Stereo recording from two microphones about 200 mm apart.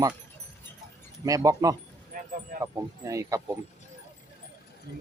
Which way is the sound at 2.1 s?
45° right (ahead or behind).